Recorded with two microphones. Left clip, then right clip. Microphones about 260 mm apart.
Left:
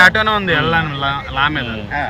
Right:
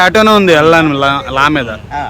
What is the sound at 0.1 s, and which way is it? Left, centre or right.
Speech, right.